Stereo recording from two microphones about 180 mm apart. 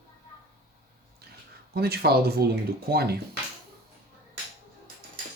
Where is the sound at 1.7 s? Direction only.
60° right (ahead or behind).